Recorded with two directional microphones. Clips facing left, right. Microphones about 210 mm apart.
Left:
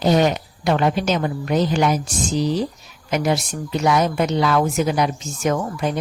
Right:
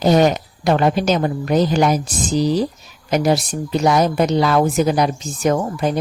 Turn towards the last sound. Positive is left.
turn(degrees=-30)  # may be behind; listen again after turning